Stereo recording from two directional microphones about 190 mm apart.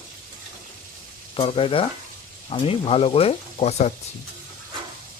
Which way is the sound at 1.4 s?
30° left (ahead or behind).